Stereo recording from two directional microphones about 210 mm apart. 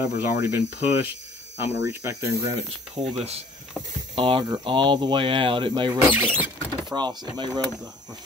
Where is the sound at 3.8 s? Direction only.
10° left (ahead or behind).